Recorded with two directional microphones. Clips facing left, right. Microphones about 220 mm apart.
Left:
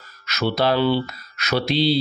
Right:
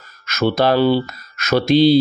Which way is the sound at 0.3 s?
50° right (ahead or behind).